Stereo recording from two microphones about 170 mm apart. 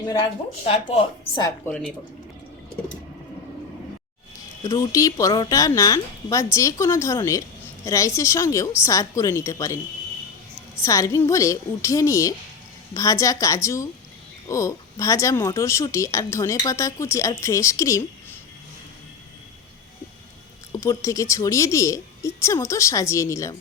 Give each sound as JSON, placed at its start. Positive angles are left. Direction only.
{"t": 0.6, "sound": "speech", "side_deg": 40}
{"t": 1.6, "sound": "speech", "side_deg": 5}
{"t": 4.6, "sound": "a woman's voice", "side_deg": 20}
{"t": 10.8, "sound": "speech", "side_deg": 20}
{"t": 20.7, "sound": "speech", "side_deg": 20}